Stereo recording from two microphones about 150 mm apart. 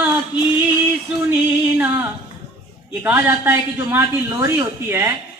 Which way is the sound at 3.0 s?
15° right (ahead or behind).